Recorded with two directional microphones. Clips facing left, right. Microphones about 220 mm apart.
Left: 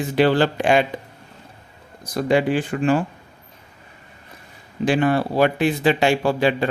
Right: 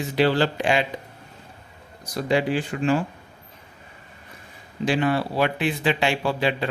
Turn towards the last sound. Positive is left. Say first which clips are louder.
# left 5 dB
turn(degrees=45)  # may be behind; listen again after turning